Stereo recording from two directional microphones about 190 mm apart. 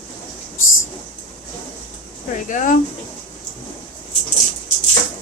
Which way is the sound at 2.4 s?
40° left (ahead or behind).